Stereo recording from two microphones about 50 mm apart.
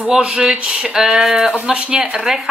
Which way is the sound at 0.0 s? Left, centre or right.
Centre.